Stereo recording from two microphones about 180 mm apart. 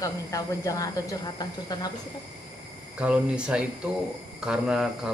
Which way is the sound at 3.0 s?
5° right (ahead or behind).